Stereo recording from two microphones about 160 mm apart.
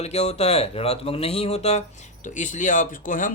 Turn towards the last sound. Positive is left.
turn(degrees=55)  # may be behind; listen again after turning